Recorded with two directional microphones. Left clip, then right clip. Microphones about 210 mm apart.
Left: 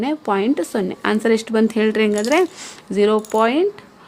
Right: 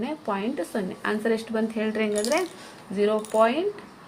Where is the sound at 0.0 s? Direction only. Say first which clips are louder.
Left 9 dB; 55° left (ahead or behind).